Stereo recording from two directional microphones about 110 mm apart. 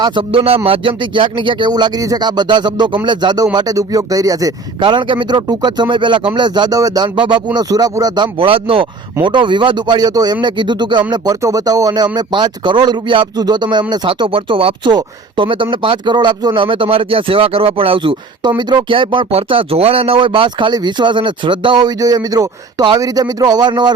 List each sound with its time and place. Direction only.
0.0 s speech: 50° right (ahead or behind); by 4.5 s 30° right (ahead or behind)
4.8 s speech: 45° right (ahead or behind)
7.5 s speech: 35° right (ahead or behind)
8.4 s speech: 55° right (ahead or behind)
11.1 s speech: 35° right (ahead or behind)